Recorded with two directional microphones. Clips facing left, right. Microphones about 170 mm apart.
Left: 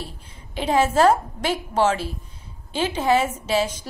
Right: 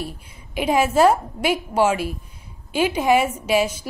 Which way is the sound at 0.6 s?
10° right (ahead or behind).